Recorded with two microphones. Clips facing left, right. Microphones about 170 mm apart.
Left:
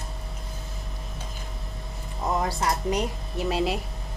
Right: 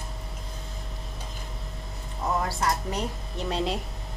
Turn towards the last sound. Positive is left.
turn(degrees=5)  # may be behind; listen again after turning